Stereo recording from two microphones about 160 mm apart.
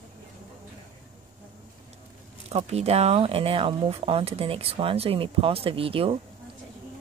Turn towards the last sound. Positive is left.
turn(degrees=-35)  # may be behind; listen again after turning